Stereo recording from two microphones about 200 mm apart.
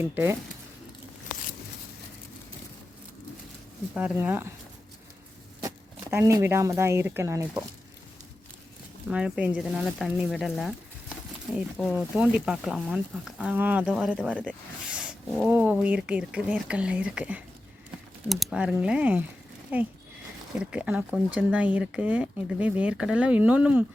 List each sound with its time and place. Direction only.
0.0 s speech: 10° right (ahead or behind)
3.9 s speech: 5° right (ahead or behind)
5.6 s speech: 15° right (ahead or behind)
9.0 s speech: 5° right (ahead or behind)